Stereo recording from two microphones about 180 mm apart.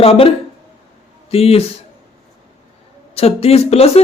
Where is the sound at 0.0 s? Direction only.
30° left (ahead or behind).